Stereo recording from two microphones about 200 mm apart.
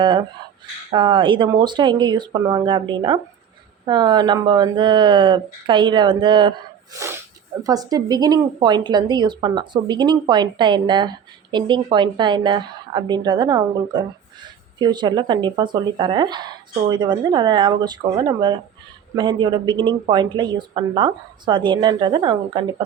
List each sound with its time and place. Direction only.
0.0 s speech: 25° right (ahead or behind)
7.0 s speech: 15° right (ahead or behind)